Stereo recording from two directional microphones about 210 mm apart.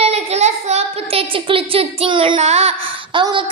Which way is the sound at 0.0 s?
30° right (ahead or behind).